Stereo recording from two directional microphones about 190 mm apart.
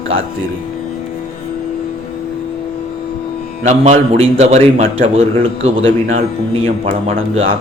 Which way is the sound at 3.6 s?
35° right (ahead or behind).